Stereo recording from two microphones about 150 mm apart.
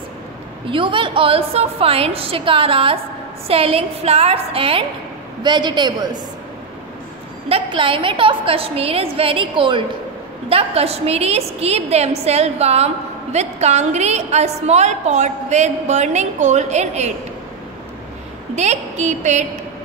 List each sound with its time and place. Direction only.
0.7 s a woman's voice: 35° right (ahead or behind)
7.4 s a woman's voice: 35° right (ahead or behind)
18.5 s a woman's voice: 50° right (ahead or behind)